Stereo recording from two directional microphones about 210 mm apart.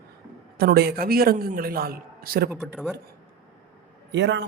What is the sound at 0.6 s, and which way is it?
A man's voice, 50° right (ahead or behind).